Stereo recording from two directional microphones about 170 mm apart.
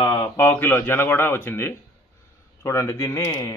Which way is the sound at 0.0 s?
25° left (ahead or behind).